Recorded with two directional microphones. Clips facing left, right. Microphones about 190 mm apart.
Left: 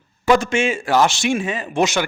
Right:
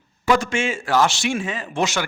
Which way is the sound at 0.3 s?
20° left (ahead or behind).